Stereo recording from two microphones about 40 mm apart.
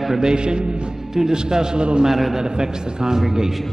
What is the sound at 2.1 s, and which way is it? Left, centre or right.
A man's voice, centre.